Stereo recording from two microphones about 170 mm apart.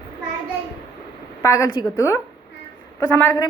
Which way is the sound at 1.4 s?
20° left (ahead or behind).